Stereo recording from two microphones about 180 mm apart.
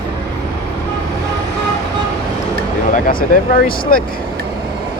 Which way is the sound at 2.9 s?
50° left (ahead or behind).